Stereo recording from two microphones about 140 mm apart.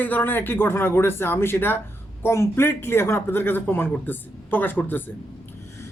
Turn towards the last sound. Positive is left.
turn(degrees=15)  # may be behind; listen again after turning